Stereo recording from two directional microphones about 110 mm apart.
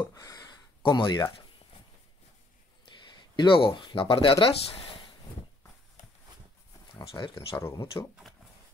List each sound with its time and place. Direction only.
0.1 s a sound: 35° left (ahead or behind)
2.8 s speech: 45° left (ahead or behind)
7.1 s speech: 50° left (ahead or behind)
8.0 s speech: 20° left (ahead or behind)